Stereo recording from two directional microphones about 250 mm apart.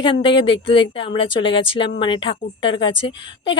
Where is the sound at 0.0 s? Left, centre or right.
Centre.